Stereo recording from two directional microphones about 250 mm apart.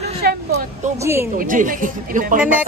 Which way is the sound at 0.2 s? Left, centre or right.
Right.